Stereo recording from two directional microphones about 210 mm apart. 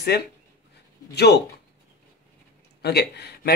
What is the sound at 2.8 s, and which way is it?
Speech, 50° left (ahead or behind).